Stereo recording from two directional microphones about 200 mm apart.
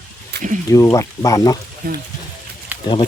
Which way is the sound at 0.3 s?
55° right (ahead or behind).